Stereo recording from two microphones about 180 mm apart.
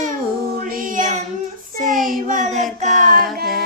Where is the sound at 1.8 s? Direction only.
Centre (ahead or behind).